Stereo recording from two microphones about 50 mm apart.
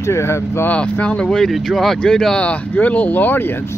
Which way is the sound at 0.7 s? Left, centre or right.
Left.